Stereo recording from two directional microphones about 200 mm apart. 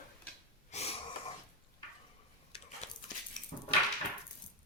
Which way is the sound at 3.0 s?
35° left (ahead or behind).